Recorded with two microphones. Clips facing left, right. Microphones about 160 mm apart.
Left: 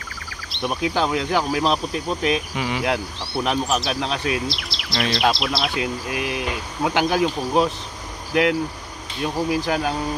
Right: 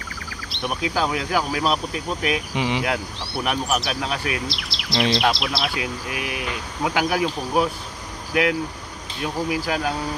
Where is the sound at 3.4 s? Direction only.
20° left (ahead or behind).